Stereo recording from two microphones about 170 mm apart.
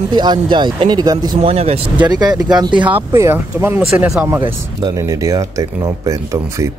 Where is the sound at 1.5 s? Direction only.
35° right (ahead or behind).